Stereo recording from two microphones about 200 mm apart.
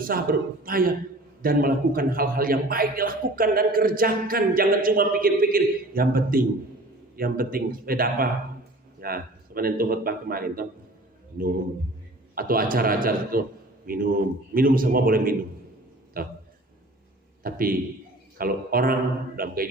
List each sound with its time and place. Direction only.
0.0 s a man's voice: 45° right (ahead or behind)
12.3 s a man's voice: 45° right (ahead or behind)
17.4 s a man's voice: 45° right (ahead or behind)